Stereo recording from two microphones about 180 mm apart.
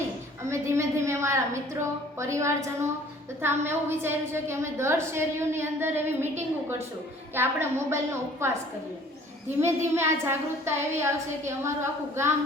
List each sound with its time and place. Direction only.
0.4 s a sound: 15° right (ahead or behind)
3.4 s a woman's voice: 15° right (ahead or behind)
7.3 s a woman's voice: 15° right (ahead or behind)
9.6 s a woman's voice: 15° right (ahead or behind)